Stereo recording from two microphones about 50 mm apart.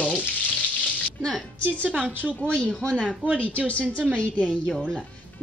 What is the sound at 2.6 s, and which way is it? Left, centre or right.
Speech, centre.